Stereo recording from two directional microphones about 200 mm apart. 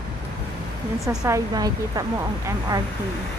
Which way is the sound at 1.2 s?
20° right (ahead or behind).